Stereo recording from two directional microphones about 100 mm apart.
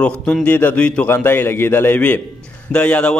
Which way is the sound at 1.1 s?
25° left (ahead or behind).